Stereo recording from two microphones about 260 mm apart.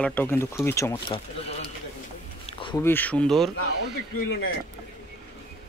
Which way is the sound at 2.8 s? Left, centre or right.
Centre.